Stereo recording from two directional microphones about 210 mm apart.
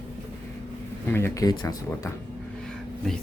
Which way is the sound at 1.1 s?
10° left (ahead or behind).